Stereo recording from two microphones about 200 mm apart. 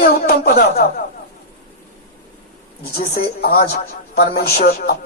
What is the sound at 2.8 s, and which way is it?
A man's voice, 50° left (ahead or behind).